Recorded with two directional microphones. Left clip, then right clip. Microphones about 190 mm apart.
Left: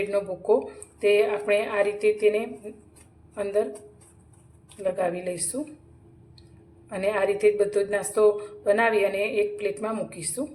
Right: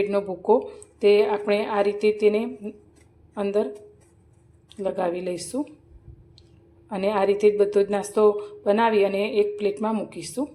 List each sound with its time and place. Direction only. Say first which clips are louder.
0.1 s a woman's voice: right 2 dB; 30° right (ahead or behind)
4.8 s a woman's voice: right 1 dB; 35° right (ahead or behind)
6.9 s a woman's voice: right 2 dB; 35° right (ahead or behind)